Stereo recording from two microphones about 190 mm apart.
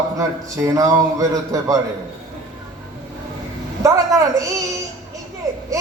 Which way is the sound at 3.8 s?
15° right (ahead or behind).